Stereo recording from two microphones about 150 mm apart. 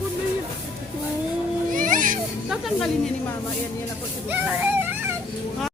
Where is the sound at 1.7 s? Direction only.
60° right (ahead or behind).